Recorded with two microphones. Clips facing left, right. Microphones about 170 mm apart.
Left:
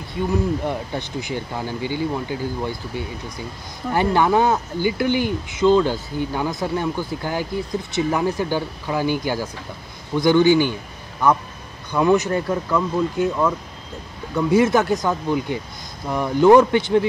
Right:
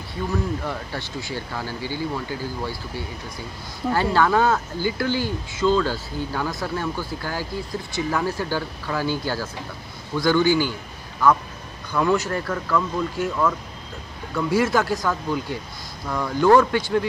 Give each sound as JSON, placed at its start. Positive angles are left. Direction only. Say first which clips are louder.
{"t": 0.3, "sound": "a man's voice", "louder": "left 4 dB", "side_deg": 20}